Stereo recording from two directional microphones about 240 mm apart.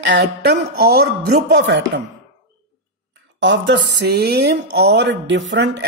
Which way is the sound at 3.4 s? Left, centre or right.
Right.